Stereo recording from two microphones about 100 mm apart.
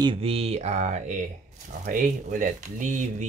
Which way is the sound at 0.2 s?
75° right (ahead or behind).